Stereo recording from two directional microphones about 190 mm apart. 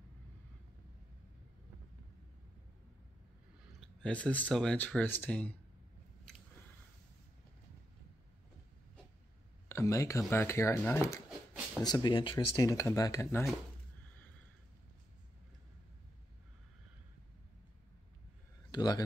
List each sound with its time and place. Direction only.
4.0 s speech: 5° left (ahead or behind)
9.7 s speech: 15° left (ahead or behind)
18.7 s a man's voice: 20° left (ahead or behind)